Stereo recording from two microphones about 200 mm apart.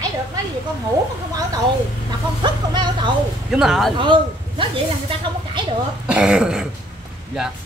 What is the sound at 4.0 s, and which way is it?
A woman's voice, 25° right (ahead or behind).